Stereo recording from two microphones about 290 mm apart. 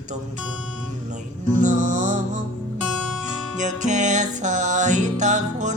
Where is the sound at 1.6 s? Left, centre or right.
Right.